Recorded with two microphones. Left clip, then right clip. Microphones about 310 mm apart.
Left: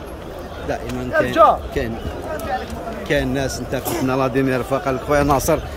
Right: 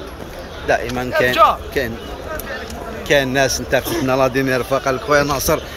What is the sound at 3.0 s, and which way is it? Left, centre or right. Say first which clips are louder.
Speech: right 6 dB; centre.